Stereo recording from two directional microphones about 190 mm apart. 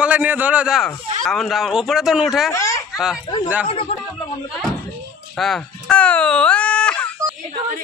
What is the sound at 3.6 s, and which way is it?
Speech, 30° left (ahead or behind).